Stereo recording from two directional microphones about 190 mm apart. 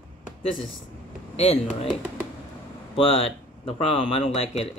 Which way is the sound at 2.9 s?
30° left (ahead or behind).